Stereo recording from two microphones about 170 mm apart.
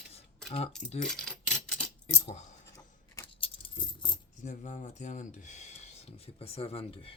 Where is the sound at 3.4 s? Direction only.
30° left (ahead or behind).